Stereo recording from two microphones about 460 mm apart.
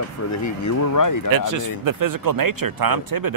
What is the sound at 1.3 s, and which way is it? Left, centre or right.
Speech, right.